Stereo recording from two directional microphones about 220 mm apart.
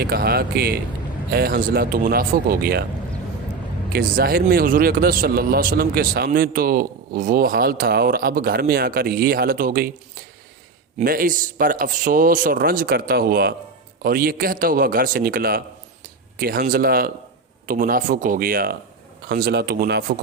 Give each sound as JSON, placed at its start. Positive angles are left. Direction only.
{"t": 0.0, "sound": "a man's voice", "side_deg": -45}
{"t": 3.9, "sound": "a man's voice", "side_deg": -45}
{"t": 10.9, "sound": "a man's voice", "side_deg": -40}